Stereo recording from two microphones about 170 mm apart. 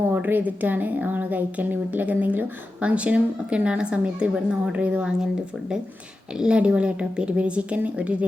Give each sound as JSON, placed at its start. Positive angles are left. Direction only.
{"t": 0.1, "sound": "a woman's voice", "side_deg": -10}